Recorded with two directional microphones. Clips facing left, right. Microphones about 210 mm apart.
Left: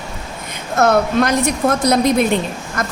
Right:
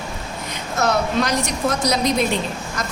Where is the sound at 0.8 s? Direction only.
55° left (ahead or behind).